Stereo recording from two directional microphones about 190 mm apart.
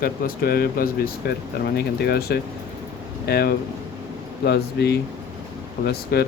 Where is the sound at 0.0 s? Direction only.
50° left (ahead or behind).